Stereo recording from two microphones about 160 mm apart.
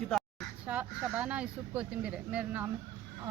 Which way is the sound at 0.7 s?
10° right (ahead or behind).